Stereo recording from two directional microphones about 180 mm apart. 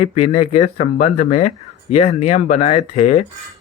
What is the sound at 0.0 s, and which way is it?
Speech, 35° left (ahead or behind).